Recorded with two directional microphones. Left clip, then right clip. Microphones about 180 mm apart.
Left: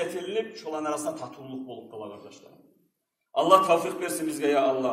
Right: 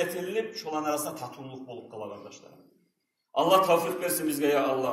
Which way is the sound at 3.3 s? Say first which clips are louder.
Left 2 dB; 15° left (ahead or behind).